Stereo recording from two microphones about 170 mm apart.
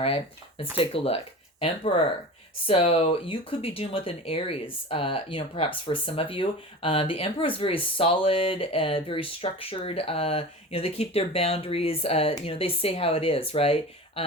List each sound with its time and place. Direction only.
0.8 s speech: 35° left (ahead or behind)